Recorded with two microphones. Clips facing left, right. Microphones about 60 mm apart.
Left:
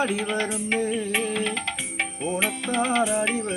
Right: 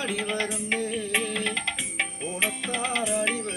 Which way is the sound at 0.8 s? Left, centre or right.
Left.